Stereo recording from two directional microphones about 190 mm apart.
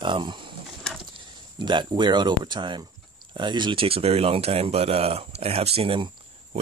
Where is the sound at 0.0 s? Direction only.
25° right (ahead or behind).